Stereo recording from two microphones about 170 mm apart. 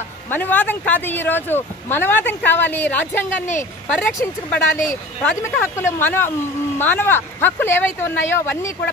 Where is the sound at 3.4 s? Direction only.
45° left (ahead or behind).